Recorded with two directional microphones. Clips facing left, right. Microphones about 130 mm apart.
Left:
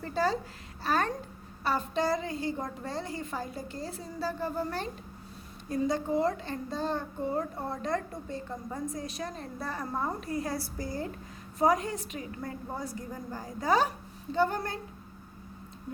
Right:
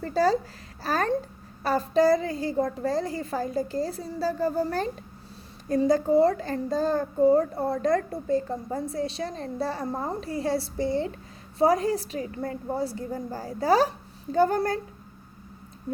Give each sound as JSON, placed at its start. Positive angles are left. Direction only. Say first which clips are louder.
{"t": 0.0, "sound": "a child's voice", "louder": "right 6 dB", "side_deg": -40}
{"t": 5.9, "sound": "a child's voice", "louder": "right 10 dB", "side_deg": -35}
{"t": 9.8, "sound": "a child's voice", "louder": "right 3 dB", "side_deg": -45}
{"t": 10.1, "sound": "a woman's voice", "louder": "right 5 dB", "side_deg": -30}